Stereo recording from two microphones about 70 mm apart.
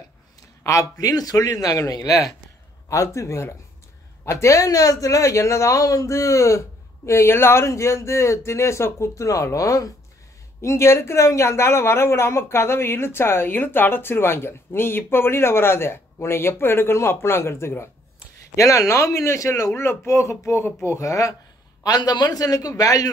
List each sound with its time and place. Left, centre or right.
0.7 s a man's voice: left
18.6 s a man's voice: left
19.7 s a woman's voice: left
21.8 s a man's voice: left